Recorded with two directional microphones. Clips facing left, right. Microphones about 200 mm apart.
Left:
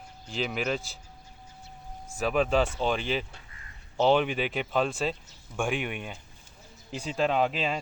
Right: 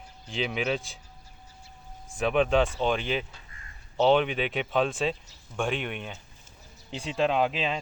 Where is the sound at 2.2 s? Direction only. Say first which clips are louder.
Right 2 dB; centre (ahead or behind).